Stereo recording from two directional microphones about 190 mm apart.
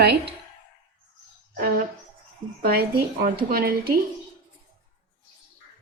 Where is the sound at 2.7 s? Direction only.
50° right (ahead or behind).